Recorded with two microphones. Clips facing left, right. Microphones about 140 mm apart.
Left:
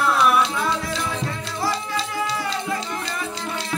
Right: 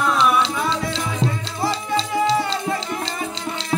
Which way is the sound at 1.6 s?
25° right (ahead or behind).